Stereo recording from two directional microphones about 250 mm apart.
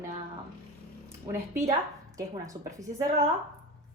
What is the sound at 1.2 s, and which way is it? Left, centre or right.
A woman's voice, centre.